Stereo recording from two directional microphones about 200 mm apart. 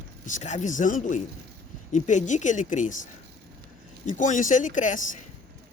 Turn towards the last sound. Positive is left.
turn(degrees=40)  # may be behind; listen again after turning